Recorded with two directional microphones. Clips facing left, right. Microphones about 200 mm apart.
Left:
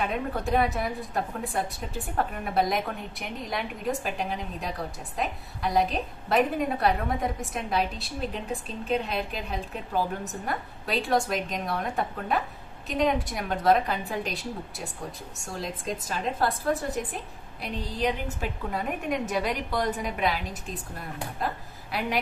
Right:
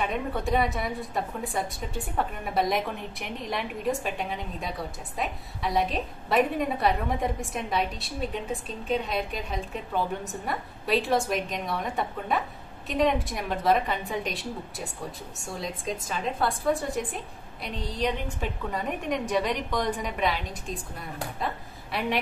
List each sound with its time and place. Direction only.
0.0 s a woman's voice: centre (ahead or behind)